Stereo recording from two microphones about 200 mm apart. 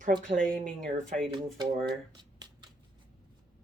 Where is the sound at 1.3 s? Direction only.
25° right (ahead or behind).